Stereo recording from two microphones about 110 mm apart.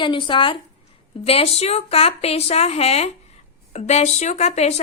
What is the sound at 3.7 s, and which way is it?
Speech, 85° left.